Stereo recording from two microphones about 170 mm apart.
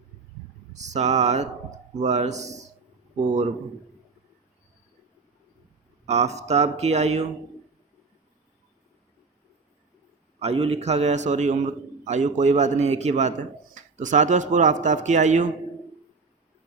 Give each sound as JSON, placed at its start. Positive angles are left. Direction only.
{"t": 0.7, "sound": "a sound", "side_deg": -45}
{"t": 2.0, "sound": "a man's voice", "side_deg": -40}
{"t": 6.1, "sound": "speech", "side_deg": -40}
{"t": 10.4, "sound": "a man's voice", "side_deg": -35}